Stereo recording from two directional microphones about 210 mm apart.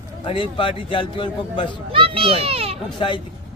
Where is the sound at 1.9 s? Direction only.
25° right (ahead or behind).